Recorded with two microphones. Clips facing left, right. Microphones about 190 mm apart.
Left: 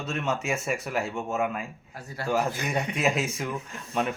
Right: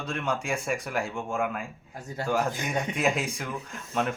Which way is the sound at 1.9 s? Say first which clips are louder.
Right 4 dB; 20° right (ahead or behind).